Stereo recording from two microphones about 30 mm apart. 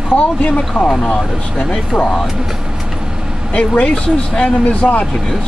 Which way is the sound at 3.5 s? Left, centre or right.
Left.